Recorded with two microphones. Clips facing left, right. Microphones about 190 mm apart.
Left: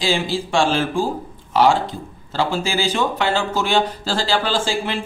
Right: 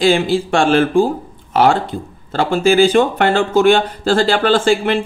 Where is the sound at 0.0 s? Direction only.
55° right (ahead or behind).